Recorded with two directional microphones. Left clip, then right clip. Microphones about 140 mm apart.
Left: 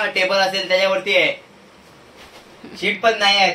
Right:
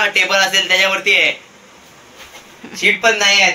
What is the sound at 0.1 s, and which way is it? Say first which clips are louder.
Speech: right 4 dB; 35° left (ahead or behind).